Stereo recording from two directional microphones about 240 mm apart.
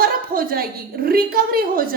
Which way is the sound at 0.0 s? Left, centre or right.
Right.